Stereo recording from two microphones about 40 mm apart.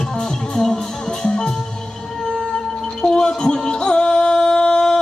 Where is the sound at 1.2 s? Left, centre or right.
Centre.